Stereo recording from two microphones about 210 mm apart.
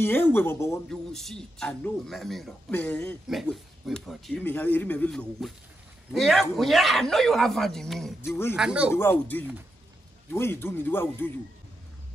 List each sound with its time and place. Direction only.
0.0 s speech: 10° left (ahead or behind)
0.8 s a man's voice: centre (ahead or behind)
8.5 s a man's voice: 5° right (ahead or behind)
8.9 s speech: 10° left (ahead or behind)